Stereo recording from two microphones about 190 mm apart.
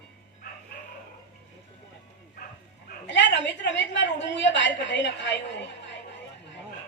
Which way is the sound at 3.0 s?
70° left (ahead or behind).